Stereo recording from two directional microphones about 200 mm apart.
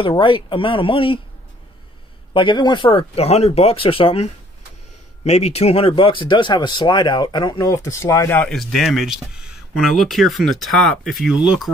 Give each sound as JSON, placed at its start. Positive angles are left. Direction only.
{"t": 0.0, "sound": "speech", "side_deg": 25}
{"t": 2.3, "sound": "speech", "side_deg": 25}